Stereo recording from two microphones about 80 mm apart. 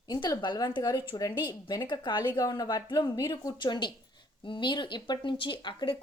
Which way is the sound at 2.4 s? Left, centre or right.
Left.